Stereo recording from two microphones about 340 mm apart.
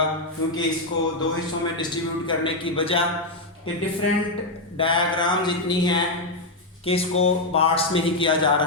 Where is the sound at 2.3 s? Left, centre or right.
Centre.